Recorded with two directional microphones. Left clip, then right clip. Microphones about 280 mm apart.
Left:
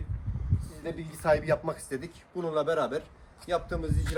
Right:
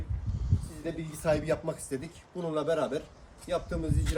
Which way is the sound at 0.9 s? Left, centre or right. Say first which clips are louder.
Left 3 dB; centre.